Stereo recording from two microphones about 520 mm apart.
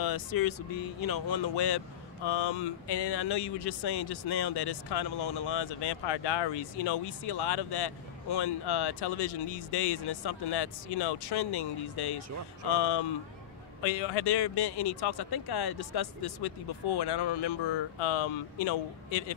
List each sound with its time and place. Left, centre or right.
0.0 s speech: left